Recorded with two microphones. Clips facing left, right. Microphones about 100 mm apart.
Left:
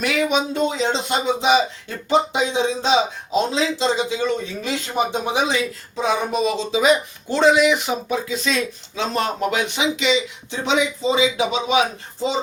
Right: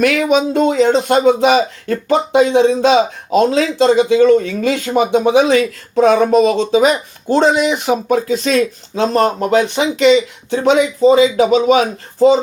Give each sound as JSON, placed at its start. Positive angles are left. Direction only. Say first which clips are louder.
{"t": 0.0, "sound": "speech", "louder": "right 7 dB", "side_deg": -55}
{"t": 6.1, "sound": "speech", "louder": "right 10 dB", "side_deg": -70}